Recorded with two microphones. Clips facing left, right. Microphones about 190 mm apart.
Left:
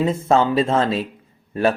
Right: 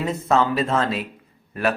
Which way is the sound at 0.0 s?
25° left (ahead or behind).